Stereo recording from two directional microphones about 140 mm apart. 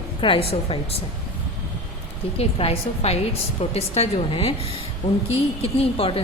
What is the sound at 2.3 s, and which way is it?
A woman's voice, 45° left (ahead or behind).